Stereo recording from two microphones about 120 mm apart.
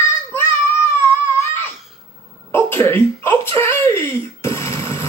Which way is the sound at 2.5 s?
20° left (ahead or behind).